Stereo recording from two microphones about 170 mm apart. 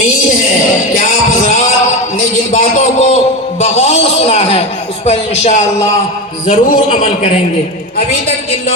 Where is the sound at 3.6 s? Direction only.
40° left (ahead or behind).